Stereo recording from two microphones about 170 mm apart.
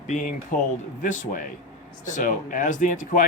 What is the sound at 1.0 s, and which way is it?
Speech, 50° left (ahead or behind).